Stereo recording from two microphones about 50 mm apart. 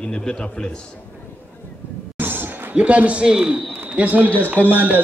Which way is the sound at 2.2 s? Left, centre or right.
Right.